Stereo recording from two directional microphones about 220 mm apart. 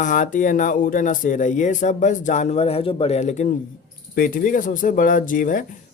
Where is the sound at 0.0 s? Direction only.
35° left (ahead or behind).